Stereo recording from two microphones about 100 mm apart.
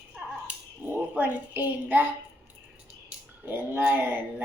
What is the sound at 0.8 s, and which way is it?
A woman's voice, 15° right (ahead or behind).